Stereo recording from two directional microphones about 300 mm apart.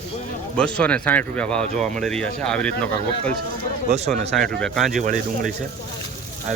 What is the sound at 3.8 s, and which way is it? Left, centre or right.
Speech, right.